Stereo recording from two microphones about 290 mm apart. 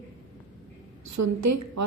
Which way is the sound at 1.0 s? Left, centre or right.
Right.